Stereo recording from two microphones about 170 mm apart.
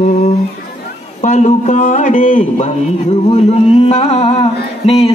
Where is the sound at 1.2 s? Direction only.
40° left (ahead or behind).